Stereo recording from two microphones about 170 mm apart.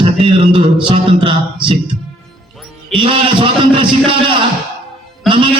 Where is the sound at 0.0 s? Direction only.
35° right (ahead or behind).